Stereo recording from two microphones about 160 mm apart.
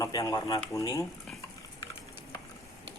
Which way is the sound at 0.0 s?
20° left (ahead or behind).